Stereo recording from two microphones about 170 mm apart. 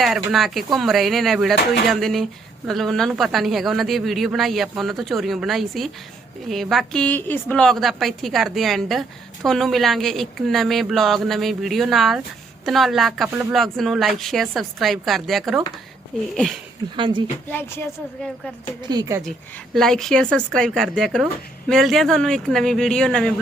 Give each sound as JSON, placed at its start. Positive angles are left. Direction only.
{"t": 0.3, "sound": "a woman's voice", "side_deg": 0}
{"t": 17.0, "sound": "speech", "side_deg": -30}
{"t": 17.5, "sound": "a woman's voice", "side_deg": 10}
{"t": 18.8, "sound": "speech", "side_deg": -25}
{"t": 19.7, "sound": "a woman's voice", "side_deg": 0}